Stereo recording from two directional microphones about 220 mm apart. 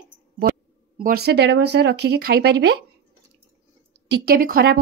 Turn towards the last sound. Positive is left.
turn(degrees=-40)  # may be behind; listen again after turning